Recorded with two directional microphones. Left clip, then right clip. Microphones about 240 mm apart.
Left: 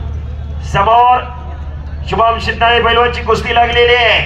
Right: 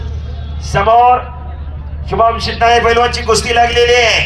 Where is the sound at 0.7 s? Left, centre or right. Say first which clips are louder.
Even; right.